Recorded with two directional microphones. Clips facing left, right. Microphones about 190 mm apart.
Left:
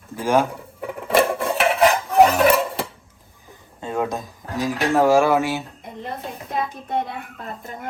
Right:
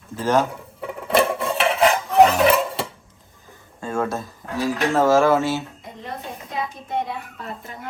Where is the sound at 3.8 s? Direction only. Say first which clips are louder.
Even; 15° left (ahead or behind).